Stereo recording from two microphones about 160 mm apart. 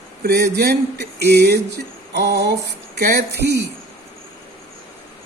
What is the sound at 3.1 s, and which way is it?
Speech, 75° right (ahead or behind).